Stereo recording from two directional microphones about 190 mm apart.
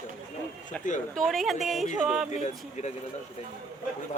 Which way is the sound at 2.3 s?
35° left (ahead or behind).